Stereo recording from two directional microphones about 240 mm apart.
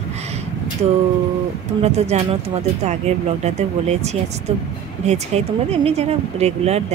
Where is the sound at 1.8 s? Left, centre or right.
Right.